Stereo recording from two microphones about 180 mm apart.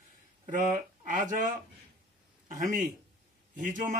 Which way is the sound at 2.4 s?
45° right (ahead or behind).